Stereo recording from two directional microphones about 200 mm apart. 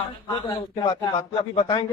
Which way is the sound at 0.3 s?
20° left (ahead or behind).